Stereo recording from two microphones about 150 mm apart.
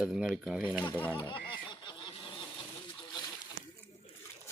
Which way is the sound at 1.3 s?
30° left (ahead or behind).